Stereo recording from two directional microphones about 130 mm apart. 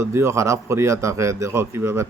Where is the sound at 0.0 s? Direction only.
20° right (ahead or behind).